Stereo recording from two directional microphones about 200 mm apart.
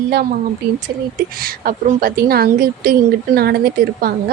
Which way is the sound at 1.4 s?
45° right (ahead or behind).